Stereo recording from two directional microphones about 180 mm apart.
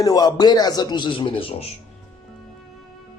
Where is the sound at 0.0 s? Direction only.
20° left (ahead or behind).